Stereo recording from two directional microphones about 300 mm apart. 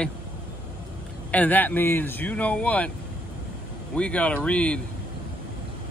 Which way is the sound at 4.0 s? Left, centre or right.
Centre.